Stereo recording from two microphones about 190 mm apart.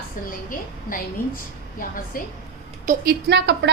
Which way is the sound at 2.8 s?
60° right (ahead or behind).